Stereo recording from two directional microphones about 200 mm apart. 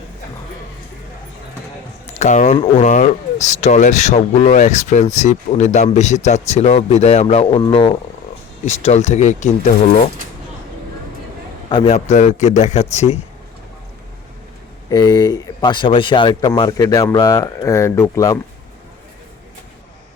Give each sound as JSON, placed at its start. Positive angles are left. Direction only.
{"t": 2.0, "sound": "speech", "side_deg": 35}
{"t": 11.7, "sound": "speech", "side_deg": 30}
{"t": 14.8, "sound": "speech", "side_deg": 20}